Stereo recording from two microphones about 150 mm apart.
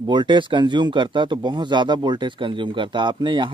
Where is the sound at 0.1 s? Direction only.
30° right (ahead or behind).